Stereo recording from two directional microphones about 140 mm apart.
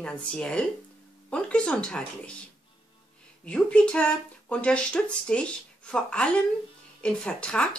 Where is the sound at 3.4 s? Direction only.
10° left (ahead or behind).